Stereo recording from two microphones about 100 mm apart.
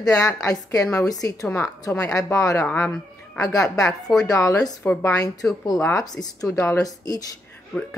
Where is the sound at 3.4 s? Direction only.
35° left (ahead or behind).